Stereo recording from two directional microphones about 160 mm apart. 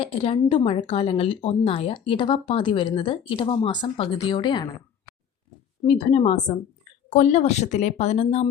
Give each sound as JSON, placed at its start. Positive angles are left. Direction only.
{"t": 0.0, "sound": "speech", "side_deg": 35}
{"t": 5.8, "sound": "speech", "side_deg": 40}